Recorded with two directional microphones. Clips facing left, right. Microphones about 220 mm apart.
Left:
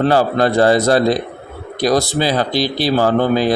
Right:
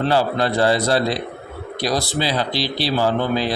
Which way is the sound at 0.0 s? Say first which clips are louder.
Left 5 dB; 45° left (ahead or behind).